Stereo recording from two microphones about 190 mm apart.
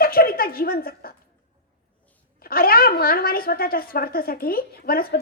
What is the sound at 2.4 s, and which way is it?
A woman's voice, 50° left (ahead or behind).